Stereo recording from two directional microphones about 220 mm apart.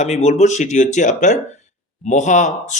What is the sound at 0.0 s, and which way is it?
Speech, 30° left (ahead or behind).